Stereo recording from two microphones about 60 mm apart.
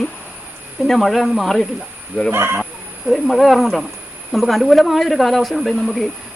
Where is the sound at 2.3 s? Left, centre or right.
Right.